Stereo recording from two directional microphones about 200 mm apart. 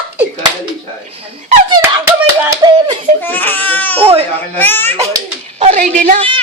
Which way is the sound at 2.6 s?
20° right (ahead or behind).